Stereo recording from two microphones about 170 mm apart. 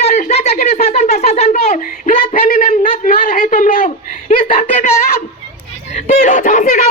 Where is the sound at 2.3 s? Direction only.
55° left (ahead or behind).